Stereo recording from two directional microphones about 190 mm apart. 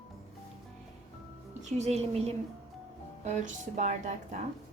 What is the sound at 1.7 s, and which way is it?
A woman's voice, 35° right (ahead or behind).